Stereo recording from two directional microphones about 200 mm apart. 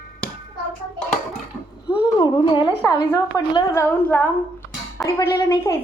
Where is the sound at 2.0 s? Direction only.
20° left (ahead or behind).